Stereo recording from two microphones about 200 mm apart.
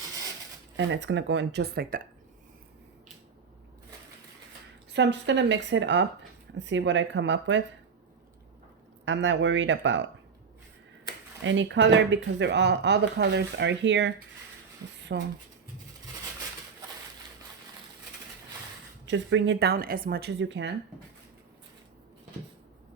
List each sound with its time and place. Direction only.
0.8 s speech: 65° right (ahead or behind)
4.9 s speech: 60° right (ahead or behind)
9.0 s speech: 65° right (ahead or behind)
11.4 s speech: 70° right (ahead or behind)
15.1 s speech: 55° right (ahead or behind)
19.0 s speech: 65° right (ahead or behind)